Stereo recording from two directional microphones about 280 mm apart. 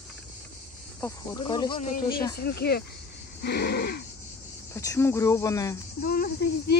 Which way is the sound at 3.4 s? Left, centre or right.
Left.